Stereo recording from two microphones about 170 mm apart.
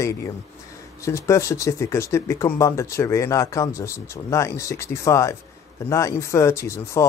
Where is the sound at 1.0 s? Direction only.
15° left (ahead or behind).